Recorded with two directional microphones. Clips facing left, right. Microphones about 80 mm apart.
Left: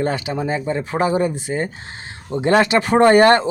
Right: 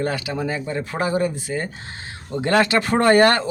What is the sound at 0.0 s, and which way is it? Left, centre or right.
Speech, left.